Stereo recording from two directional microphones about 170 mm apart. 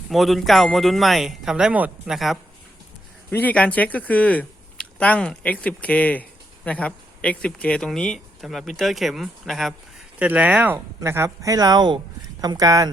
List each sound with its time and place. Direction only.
0.1 s speech: centre (ahead or behind); by 12.9 s 20° right (ahead or behind)